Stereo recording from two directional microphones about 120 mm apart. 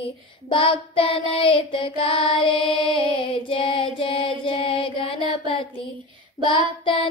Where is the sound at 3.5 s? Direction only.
50° left (ahead or behind).